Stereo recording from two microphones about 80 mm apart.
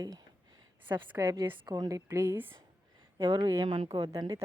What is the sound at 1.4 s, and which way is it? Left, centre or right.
Speech, right.